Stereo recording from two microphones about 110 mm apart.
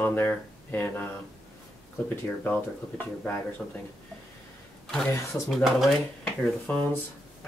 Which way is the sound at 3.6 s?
Centre (ahead or behind).